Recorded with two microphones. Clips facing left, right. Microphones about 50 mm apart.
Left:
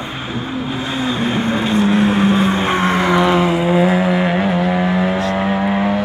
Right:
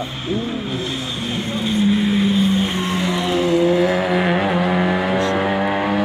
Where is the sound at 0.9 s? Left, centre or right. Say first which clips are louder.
Left 7 dB; left.